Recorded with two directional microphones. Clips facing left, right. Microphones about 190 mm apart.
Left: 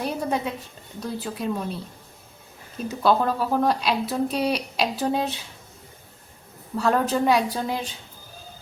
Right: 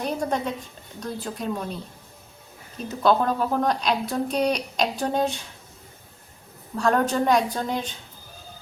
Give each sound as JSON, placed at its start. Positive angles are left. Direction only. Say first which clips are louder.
{"t": 0.0, "sound": "a woman's voice", "louder": "even", "side_deg": 5}
{"t": 3.0, "sound": "speech", "louder": "right 1 dB", "side_deg": 5}
{"t": 6.7, "sound": "speech", "louder": "even", "side_deg": 5}